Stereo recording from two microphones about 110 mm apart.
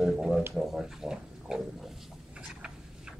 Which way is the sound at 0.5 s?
5° right (ahead or behind).